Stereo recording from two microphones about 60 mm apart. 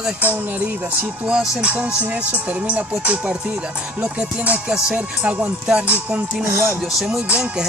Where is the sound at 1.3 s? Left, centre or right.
Centre.